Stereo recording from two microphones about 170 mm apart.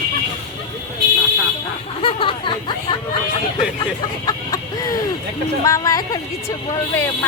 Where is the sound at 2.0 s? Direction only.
30° left (ahead or behind).